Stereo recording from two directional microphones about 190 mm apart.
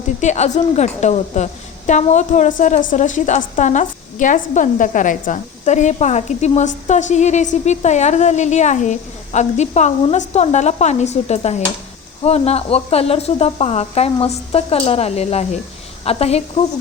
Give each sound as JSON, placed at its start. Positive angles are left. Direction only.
{"t": 0.2, "sound": "a woman's voice", "side_deg": 40}